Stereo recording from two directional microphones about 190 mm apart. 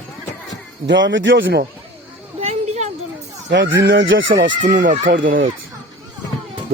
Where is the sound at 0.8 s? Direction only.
70° right (ahead or behind).